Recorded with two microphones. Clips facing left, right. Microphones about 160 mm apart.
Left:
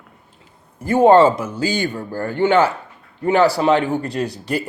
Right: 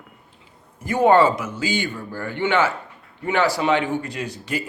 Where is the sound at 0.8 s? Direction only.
30° left (ahead or behind).